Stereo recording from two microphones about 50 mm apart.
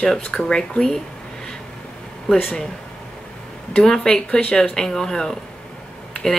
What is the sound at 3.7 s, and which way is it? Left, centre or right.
A woman's voice, centre.